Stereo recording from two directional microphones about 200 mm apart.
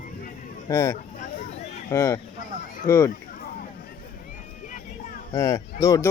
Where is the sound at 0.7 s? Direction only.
15° left (ahead or behind).